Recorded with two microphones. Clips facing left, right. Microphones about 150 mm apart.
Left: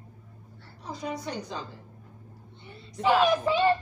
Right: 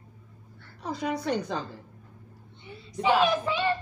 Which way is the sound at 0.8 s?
70° right (ahead or behind).